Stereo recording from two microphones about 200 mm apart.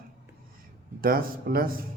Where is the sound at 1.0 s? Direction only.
45° right (ahead or behind).